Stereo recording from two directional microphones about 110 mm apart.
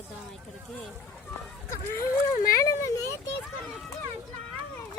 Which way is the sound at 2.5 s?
30° left (ahead or behind).